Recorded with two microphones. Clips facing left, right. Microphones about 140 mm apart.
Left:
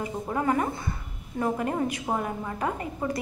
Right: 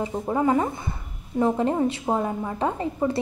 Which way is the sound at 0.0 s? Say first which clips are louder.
Right 5 dB; 20° right (ahead or behind).